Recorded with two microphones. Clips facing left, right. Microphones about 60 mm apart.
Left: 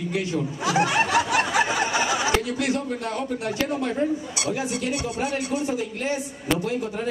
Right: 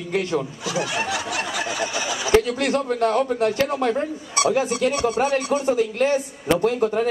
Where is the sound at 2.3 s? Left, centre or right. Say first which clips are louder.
Right 5 dB; right.